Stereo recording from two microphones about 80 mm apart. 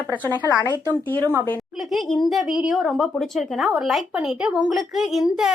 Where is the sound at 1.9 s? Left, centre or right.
Centre.